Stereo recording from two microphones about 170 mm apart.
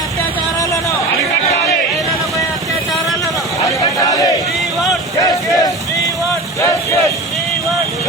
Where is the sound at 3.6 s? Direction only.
20° left (ahead or behind).